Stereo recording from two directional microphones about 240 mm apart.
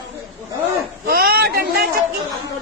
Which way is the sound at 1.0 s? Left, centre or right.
Right.